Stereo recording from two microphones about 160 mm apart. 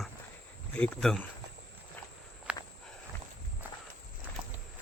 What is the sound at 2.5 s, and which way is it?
Walk, 5° right (ahead or behind).